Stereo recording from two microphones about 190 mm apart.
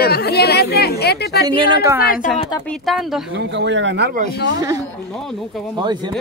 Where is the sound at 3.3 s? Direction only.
70° right (ahead or behind).